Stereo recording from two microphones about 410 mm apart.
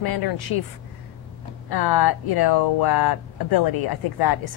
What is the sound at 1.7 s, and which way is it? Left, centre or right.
A woman's voice, left.